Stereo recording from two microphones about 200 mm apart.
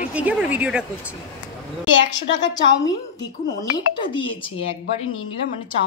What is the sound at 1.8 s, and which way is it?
Speech, 65° left (ahead or behind).